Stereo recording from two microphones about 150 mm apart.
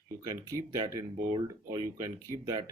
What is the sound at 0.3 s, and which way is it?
Speech, 25° right (ahead or behind).